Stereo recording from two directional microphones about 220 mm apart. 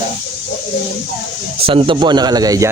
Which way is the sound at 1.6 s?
25° right (ahead or behind).